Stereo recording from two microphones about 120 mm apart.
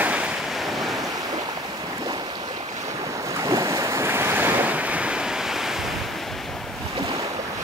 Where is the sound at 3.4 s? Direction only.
30° right (ahead or behind); by 5.7 s 5° right (ahead or behind).